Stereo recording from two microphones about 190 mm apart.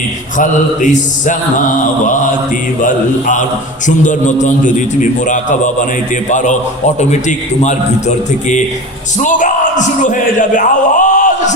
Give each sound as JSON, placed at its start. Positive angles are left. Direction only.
{"t": 0.3, "sound": "a man's voice", "side_deg": 40}